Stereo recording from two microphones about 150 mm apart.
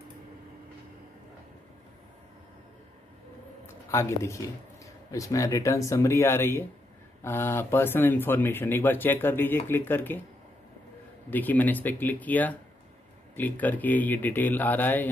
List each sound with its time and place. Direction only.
3.6 s speech: 20° left (ahead or behind)
11.2 s speech: 10° left (ahead or behind)